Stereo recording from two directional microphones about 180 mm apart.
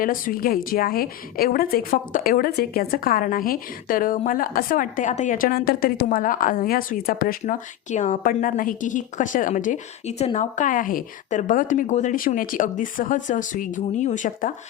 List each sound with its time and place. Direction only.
0.0 s a woman's voice: 50° left (ahead or behind)